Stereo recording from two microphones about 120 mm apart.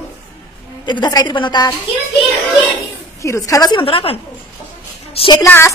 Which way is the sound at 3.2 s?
25° left (ahead or behind).